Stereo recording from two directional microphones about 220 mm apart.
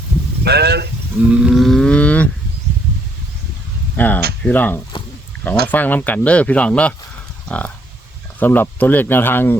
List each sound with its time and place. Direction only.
0.4 s speech: 50° right (ahead or behind)
1.2 s livestock: 5° right (ahead or behind)
3.9 s a sound: 10° left (ahead or behind)
4.4 s speech: 5° left (ahead or behind)